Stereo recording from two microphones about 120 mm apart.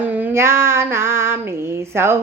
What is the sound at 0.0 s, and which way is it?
Female singing, 15° right (ahead or behind).